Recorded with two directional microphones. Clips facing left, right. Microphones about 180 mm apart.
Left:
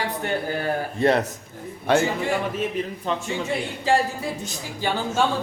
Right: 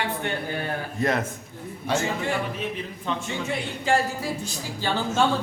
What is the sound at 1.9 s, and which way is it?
Speech, 60° left (ahead or behind).